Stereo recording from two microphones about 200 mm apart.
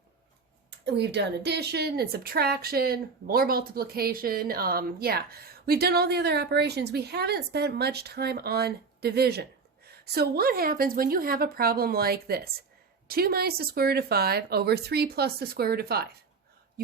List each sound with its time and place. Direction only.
0.9 s a woman's voice: 60° right (ahead or behind)